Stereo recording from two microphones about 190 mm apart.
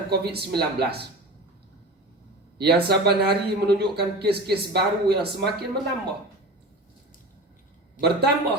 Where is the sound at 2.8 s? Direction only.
55° right (ahead or behind).